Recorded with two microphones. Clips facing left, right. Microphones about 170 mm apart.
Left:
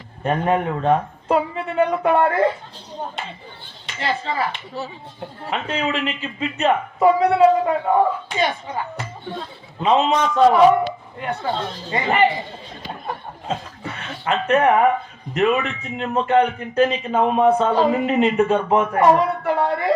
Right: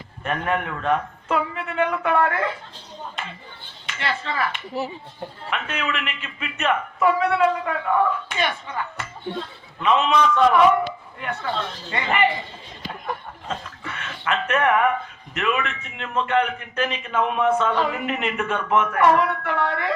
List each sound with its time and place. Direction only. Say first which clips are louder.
0.3 s speech: left 5 dB; 30° left (ahead or behind)
3.8 s speech: left 3 dB; 30° left (ahead or behind)